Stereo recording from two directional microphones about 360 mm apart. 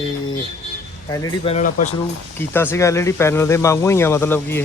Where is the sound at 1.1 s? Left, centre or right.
Centre.